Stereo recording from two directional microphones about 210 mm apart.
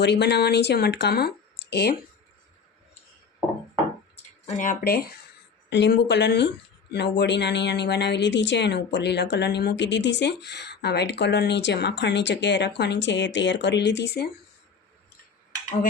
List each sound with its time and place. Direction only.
0.0 s speech: 55° left (ahead or behind)
4.2 s speech: 35° left (ahead or behind); by 14.3 s 55° left (ahead or behind)